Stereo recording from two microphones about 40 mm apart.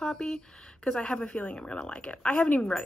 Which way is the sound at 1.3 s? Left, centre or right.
Left.